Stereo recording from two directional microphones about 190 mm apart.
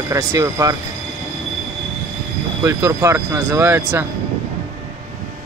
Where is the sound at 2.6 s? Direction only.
15° right (ahead or behind).